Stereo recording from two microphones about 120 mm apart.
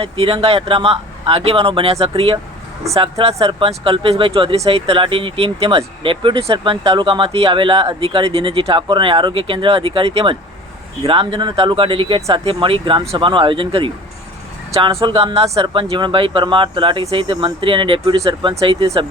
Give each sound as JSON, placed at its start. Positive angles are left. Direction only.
{"t": 0.0, "sound": "speech", "side_deg": -50}
{"t": 18.0, "sound": "speech", "side_deg": -30}
{"t": 18.5, "sound": "speech", "side_deg": -50}